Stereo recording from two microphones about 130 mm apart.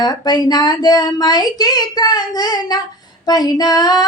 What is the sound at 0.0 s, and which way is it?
Female singing, 30° left (ahead or behind).